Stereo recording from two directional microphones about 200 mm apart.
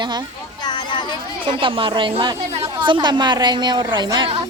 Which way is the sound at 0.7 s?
20° left (ahead or behind).